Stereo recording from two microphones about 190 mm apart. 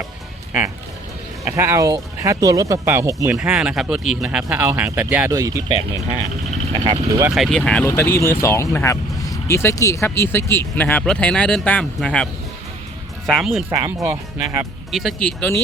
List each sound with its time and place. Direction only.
1.5 s speech: 15° right (ahead or behind)
3.3 s speech: 5° right (ahead or behind)
6.7 s speech: 20° right (ahead or behind)
7.3 s speech: centre (ahead or behind)
13.7 s speech: 15° right (ahead or behind)
14.9 s speech: 5° left (ahead or behind)